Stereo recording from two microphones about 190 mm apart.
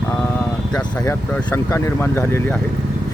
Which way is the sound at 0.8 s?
5° left (ahead or behind).